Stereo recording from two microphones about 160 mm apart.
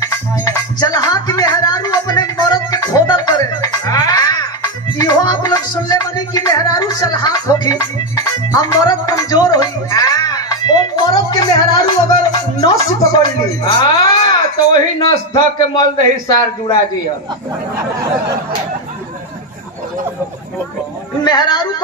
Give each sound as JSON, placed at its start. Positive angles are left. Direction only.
{"t": 0.0, "sound": "music", "side_deg": 20}
{"t": 14.7, "sound": "speech", "side_deg": 25}
{"t": 21.2, "sound": "speech", "side_deg": 25}